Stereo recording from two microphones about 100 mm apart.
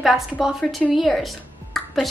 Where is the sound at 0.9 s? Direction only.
Centre (ahead or behind).